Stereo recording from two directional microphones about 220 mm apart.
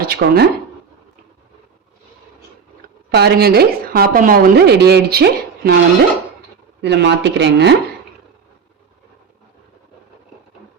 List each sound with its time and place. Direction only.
0.0 s speech: 45° right (ahead or behind)
3.1 s a woman's voice: 50° right (ahead or behind)